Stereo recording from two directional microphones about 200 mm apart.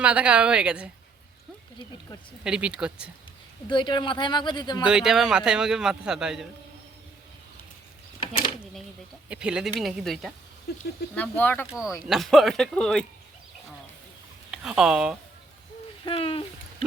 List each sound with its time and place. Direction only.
0.0 s a man's voice: 5° right (ahead or behind)
2.4 s a man's voice: 5° right (ahead or behind)
3.7 s speech: 25° left (ahead or behind)
4.8 s a man's voice: 5° right (ahead or behind)
8.2 s a sound: 25° left (ahead or behind)
9.3 s a man's voice: 5° right (ahead or behind)
10.7 s speech: 55° left (ahead or behind)
11.1 s speech: 10° left (ahead or behind)
11.6 s a man's voice: 5° right (ahead or behind)
14.5 s a man's voice: 5° right (ahead or behind)
16.0 s speech: 30° left (ahead or behind)